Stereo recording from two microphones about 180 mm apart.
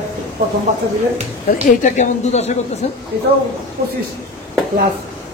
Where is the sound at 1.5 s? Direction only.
45° left (ahead or behind).